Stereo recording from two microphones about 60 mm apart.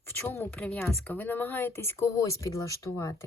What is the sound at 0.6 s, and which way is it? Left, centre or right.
Speech, left.